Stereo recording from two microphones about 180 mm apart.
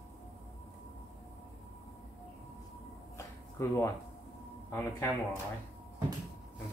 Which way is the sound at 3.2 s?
15° left (ahead or behind).